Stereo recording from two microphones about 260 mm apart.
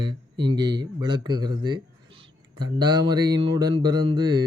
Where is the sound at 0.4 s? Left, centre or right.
Centre.